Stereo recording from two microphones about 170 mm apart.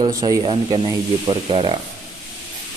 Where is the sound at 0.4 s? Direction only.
30° right (ahead or behind).